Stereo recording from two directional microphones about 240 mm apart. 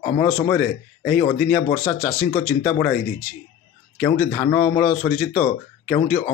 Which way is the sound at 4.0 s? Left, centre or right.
Centre.